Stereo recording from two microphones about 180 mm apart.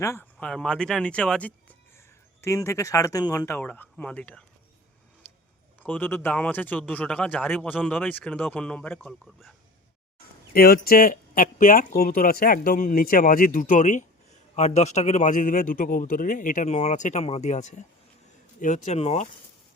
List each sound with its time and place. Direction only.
0.0 s speech: 15° left (ahead or behind)
5.8 s speech: 10° left (ahead or behind)
10.5 s speech: 55° left (ahead or behind); by 19.3 s 40° left (ahead or behind)